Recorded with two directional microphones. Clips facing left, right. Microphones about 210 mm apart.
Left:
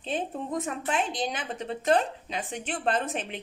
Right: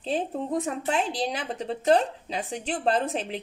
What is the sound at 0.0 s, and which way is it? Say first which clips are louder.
A woman's voice: right 3 dB; 30° right (ahead or behind).